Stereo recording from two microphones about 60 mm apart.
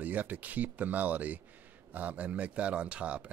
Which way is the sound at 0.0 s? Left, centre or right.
Right.